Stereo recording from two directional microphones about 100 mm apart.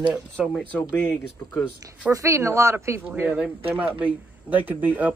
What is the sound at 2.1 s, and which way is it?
Speech, 30° right (ahead or behind).